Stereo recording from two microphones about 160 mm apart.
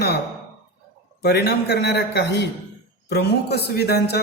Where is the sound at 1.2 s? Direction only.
90° left.